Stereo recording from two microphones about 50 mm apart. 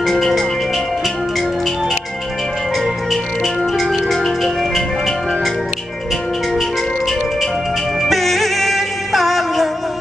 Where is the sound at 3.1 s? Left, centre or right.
Centre.